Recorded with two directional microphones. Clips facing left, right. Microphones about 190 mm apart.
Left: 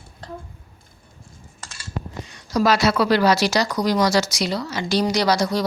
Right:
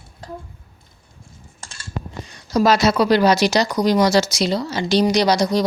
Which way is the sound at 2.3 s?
25° right (ahead or behind).